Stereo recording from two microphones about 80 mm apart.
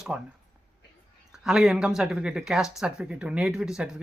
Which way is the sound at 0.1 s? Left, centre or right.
Centre.